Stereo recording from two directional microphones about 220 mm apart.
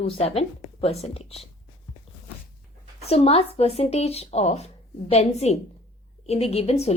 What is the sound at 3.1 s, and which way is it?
A woman's voice, 25° left (ahead or behind).